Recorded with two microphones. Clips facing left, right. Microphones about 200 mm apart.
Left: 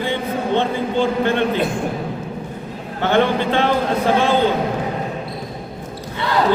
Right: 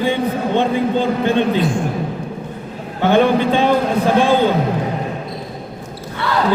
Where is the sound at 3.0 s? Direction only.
15° right (ahead or behind).